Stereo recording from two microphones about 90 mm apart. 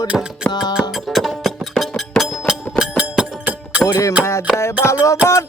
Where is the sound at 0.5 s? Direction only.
55° left (ahead or behind).